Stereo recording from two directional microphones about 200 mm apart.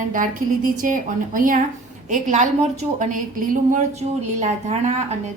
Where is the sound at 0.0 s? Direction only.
40° right (ahead or behind).